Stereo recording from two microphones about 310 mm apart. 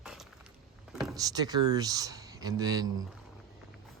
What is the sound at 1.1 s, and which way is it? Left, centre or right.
Speech, centre.